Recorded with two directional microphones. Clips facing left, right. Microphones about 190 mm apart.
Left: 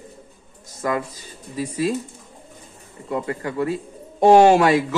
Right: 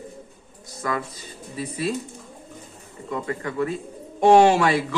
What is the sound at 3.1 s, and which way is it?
A man's voice, 35° left (ahead or behind).